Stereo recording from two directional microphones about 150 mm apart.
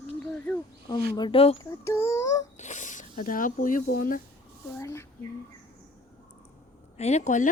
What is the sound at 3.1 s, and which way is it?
Speech, 65° left (ahead or behind).